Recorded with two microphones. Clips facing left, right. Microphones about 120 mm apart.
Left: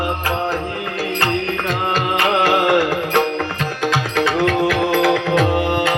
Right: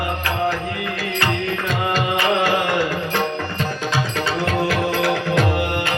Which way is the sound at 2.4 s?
75° left (ahead or behind).